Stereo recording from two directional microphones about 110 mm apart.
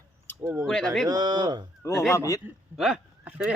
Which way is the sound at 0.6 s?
5° left (ahead or behind).